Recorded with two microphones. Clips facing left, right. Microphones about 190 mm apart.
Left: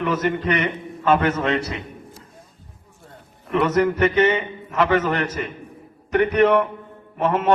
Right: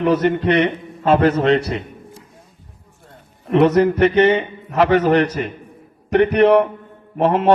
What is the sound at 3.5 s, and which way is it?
A man's voice, 35° right (ahead or behind).